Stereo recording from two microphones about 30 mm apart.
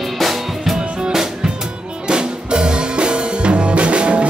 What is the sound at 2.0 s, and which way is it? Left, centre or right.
Music, right.